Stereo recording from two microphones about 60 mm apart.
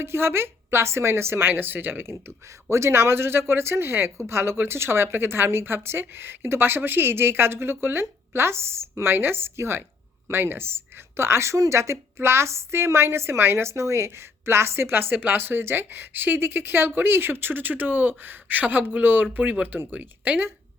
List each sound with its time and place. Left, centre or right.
0.0 s a woman's voice: right